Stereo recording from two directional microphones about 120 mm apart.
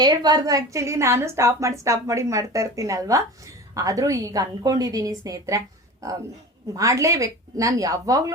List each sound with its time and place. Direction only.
0.0 s a woman's voice: 35° right (ahead or behind)